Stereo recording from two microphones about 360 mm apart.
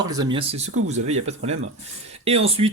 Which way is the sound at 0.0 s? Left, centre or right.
Centre.